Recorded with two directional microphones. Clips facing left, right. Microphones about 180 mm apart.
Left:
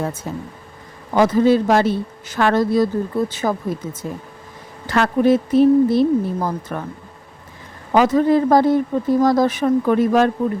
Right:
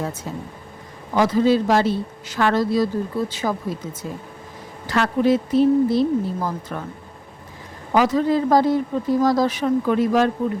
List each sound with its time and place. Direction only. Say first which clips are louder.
1.1 s speech: left 3 dB; 50° left (ahead or behind)
4.9 s speech: left 3 dB; 55° left (ahead or behind)
7.9 s speech: left 4 dB; 55° left (ahead or behind)